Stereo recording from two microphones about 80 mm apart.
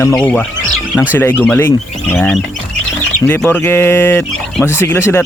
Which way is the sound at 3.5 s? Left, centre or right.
Left.